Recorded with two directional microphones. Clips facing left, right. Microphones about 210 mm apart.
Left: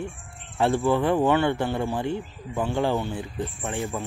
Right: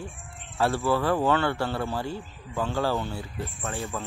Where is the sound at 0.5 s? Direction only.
15° left (ahead or behind).